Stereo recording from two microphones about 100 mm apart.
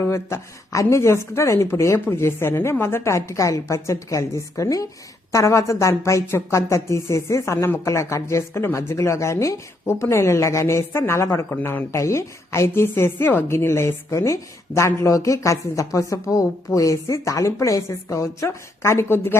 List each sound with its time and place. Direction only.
0.1 s a woman's voice: 30° left (ahead or behind)